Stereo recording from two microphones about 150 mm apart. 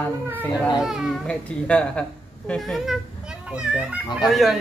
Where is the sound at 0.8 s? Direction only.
5° right (ahead or behind).